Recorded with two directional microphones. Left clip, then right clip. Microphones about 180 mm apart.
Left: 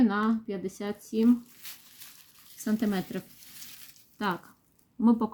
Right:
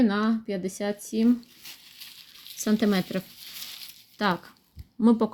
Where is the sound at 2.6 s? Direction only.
30° right (ahead or behind).